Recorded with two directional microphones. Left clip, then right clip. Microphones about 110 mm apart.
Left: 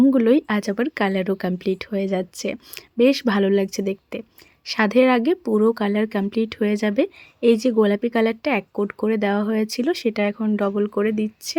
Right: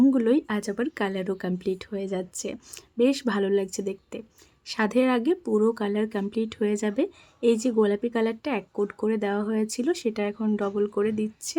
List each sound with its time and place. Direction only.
0.1 s speech: 30° left (ahead or behind)